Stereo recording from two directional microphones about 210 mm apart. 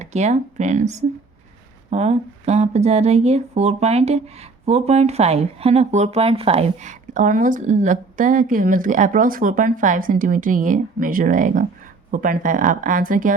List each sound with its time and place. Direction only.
0.0 s speech: 35° right (ahead or behind)